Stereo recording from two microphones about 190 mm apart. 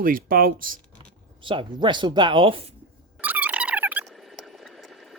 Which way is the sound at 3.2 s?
10° right (ahead or behind).